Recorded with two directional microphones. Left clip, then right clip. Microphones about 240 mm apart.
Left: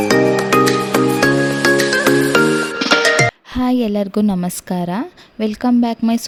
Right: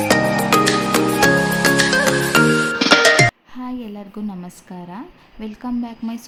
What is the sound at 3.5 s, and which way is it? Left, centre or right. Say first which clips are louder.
A woman's voice: left 13 dB; left.